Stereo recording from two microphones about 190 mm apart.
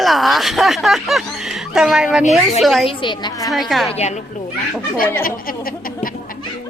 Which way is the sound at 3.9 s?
35° left (ahead or behind).